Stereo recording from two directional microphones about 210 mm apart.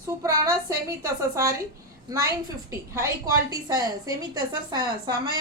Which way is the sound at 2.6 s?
15° right (ahead or behind).